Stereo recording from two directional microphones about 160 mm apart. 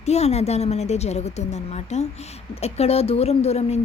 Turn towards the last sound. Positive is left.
turn(degrees=40)  # may be behind; listen again after turning